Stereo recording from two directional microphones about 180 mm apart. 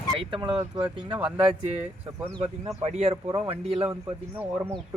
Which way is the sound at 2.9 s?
35° right (ahead or behind).